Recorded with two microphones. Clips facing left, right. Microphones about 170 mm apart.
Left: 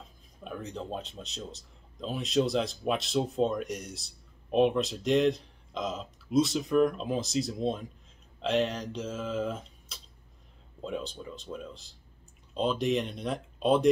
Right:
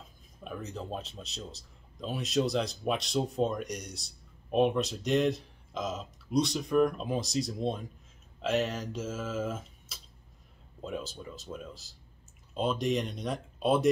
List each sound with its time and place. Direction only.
0.4 s a man's voice: centre (ahead or behind)